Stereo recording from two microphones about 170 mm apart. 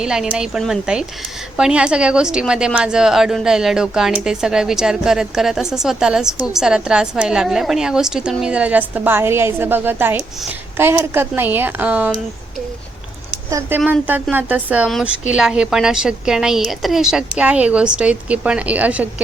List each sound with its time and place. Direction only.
0.0 s a woman's voice: 5° right (ahead or behind)
13.5 s a woman's voice: 15° right (ahead or behind)